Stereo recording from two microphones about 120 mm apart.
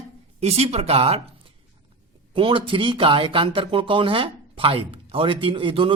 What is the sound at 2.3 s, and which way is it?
Speech, 45° right (ahead or behind).